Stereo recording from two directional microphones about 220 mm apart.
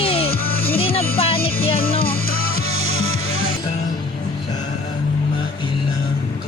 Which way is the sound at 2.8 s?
65° left (ahead or behind).